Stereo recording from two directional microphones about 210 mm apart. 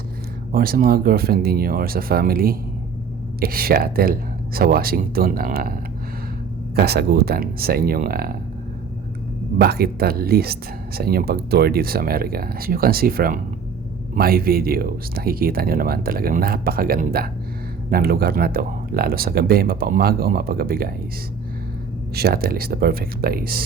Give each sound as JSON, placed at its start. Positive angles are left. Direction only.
{"t": 0.5, "sound": "speech", "side_deg": -45}
{"t": 6.7, "sound": "speech", "side_deg": -50}
{"t": 9.6, "sound": "speech", "side_deg": -50}
{"t": 22.1, "sound": "speech", "side_deg": -50}